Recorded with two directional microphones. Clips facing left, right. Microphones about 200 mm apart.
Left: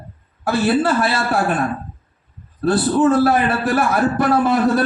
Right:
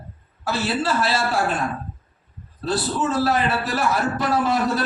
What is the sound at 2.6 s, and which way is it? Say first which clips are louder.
A man's voice: left 8 dB; 55° left (ahead or behind).